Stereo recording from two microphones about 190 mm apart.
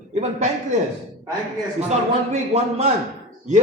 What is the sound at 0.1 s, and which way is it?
Speech, 35° right (ahead or behind).